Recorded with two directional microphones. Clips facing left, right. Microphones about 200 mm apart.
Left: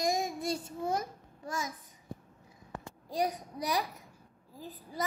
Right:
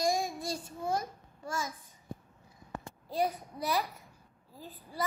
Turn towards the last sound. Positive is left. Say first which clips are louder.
# left 2 dB
turn(degrees=15)  # may be behind; listen again after turning